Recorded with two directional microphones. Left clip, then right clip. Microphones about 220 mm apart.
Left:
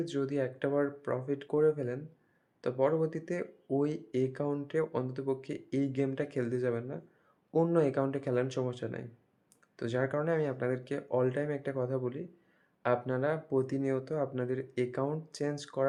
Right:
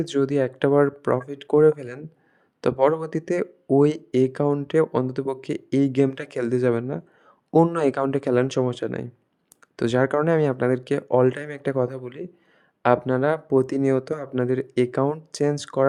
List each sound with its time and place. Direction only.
0.0 s speech: 45° right (ahead or behind)